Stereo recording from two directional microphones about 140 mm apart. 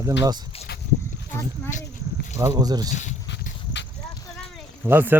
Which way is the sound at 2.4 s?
25° right (ahead or behind).